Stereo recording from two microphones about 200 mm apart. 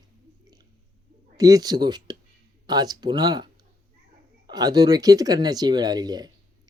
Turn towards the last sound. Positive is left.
turn(degrees=-20)  # may be behind; listen again after turning